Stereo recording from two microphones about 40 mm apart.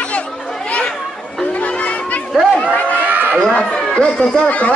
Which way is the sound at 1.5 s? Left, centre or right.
Left.